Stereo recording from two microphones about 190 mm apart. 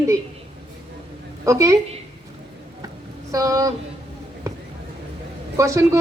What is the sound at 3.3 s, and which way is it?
Speech, 15° right (ahead or behind).